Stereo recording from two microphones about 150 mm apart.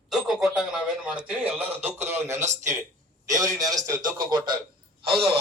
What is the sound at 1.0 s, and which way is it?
A man's voice, 5° right (ahead or behind).